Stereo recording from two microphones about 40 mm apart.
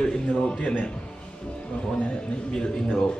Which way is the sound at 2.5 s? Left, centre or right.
Centre.